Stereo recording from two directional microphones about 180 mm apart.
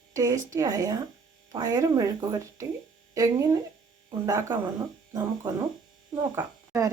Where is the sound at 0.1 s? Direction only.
20° right (ahead or behind).